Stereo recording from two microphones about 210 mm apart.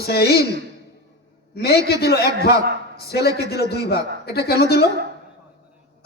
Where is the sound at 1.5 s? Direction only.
50° left (ahead or behind).